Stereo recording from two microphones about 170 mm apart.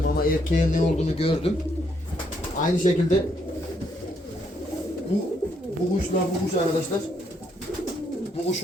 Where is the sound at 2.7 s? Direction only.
50° left (ahead or behind).